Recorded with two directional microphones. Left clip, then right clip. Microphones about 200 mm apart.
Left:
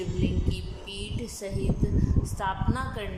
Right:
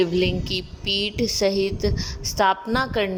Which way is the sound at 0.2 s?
45° right (ahead or behind).